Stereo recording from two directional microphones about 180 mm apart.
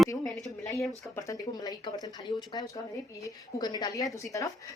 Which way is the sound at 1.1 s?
20° left (ahead or behind).